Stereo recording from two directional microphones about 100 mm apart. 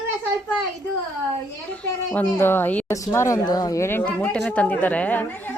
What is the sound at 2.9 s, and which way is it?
Speech, 30° left (ahead or behind).